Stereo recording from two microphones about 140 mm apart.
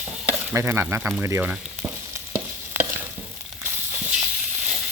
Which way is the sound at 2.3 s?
15° right (ahead or behind).